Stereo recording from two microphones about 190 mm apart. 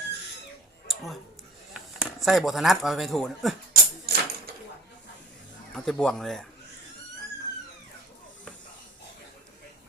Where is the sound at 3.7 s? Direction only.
55° right (ahead or behind).